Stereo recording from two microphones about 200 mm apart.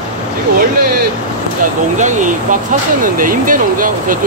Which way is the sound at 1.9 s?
40° right (ahead or behind).